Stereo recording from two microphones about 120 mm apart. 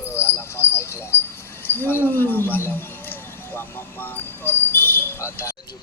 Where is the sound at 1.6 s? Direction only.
15° left (ahead or behind).